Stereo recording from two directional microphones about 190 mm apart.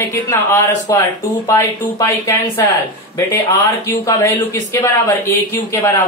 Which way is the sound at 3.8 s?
15° left (ahead or behind).